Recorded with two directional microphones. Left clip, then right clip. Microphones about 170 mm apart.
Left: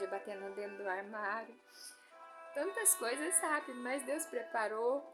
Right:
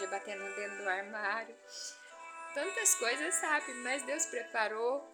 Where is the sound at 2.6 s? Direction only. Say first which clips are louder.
Right 3 dB; 25° left (ahead or behind).